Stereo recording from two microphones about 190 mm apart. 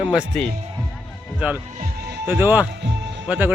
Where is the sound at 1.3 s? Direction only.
5° right (ahead or behind).